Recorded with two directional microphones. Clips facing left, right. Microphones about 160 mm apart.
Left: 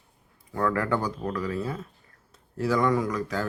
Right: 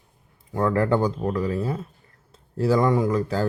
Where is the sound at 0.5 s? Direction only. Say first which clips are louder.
Right 5 dB; 25° right (ahead or behind).